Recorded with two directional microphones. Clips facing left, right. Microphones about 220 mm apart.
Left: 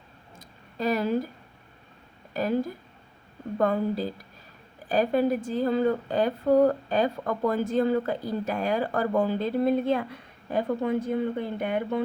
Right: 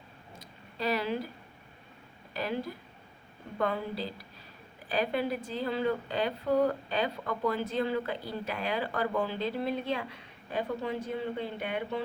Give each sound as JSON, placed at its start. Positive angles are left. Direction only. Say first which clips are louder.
{"t": 0.8, "sound": "a woman's voice", "louder": "left 6 dB", "side_deg": 45}
{"t": 2.3, "sound": "a woman's voice", "louder": "left 7 dB", "side_deg": 45}